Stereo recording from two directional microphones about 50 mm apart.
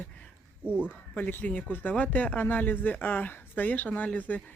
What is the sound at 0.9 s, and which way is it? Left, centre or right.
Speech, left.